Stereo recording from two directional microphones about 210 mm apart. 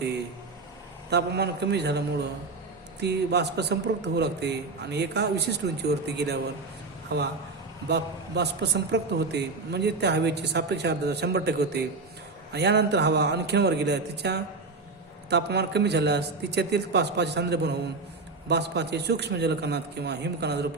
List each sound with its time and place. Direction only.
1.1 s a man's voice: 55° right (ahead or behind)